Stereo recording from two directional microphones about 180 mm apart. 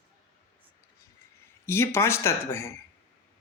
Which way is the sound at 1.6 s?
15° left (ahead or behind).